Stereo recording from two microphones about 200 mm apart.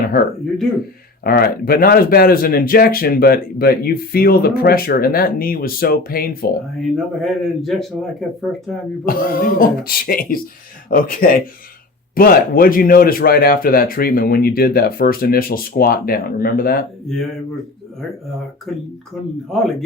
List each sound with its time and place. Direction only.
0.1 s speech: 45° left (ahead or behind)
6.9 s a man's voice: centre (ahead or behind)
9.0 s speech: 45° left (ahead or behind)
19.5 s a man's voice: centre (ahead or behind)